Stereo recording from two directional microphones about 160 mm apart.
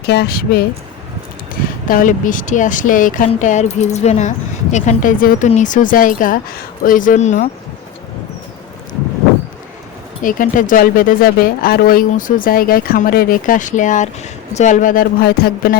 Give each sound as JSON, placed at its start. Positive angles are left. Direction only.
{"t": 0.1, "sound": "speech", "side_deg": 80}
{"t": 1.9, "sound": "speech", "side_deg": 55}
{"t": 5.2, "sound": "speech", "side_deg": 60}
{"t": 10.2, "sound": "speech", "side_deg": 55}
{"t": 15.2, "sound": "speech", "side_deg": 80}